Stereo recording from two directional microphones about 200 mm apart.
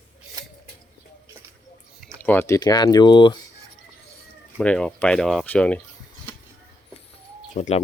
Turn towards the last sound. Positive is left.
turn(degrees=35)  # may be behind; listen again after turning